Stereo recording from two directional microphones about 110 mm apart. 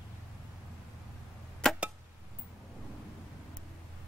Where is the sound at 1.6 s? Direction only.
5° left (ahead or behind).